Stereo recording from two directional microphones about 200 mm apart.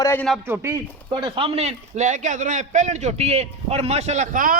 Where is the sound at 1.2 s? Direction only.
25° right (ahead or behind).